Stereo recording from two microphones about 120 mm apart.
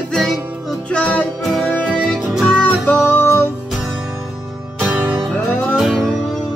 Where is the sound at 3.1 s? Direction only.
20° left (ahead or behind).